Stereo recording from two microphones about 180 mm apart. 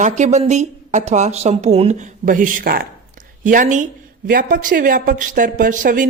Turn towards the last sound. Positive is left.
turn(degrees=-45)  # may be behind; listen again after turning